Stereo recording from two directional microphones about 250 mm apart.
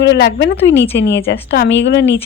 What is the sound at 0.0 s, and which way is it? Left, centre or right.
A woman's voice, left.